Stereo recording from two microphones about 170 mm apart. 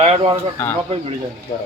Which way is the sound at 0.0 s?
35° right (ahead or behind).